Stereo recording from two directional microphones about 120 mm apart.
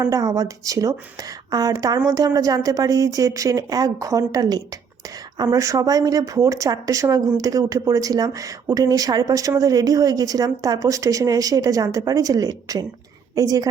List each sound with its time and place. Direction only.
0.0 s a woman's voice: 30° right (ahead or behind)